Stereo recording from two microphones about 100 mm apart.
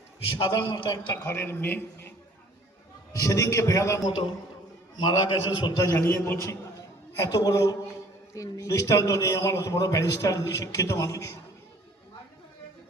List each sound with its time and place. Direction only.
0.3 s a man's voice: 60° left (ahead or behind)
1.2 s a man's voice: 25° left (ahead or behind)
3.1 s a man's voice: 35° left (ahead or behind)
4.9 s a man's voice: 50° left (ahead or behind)
5.9 s a man's voice: 25° left (ahead or behind)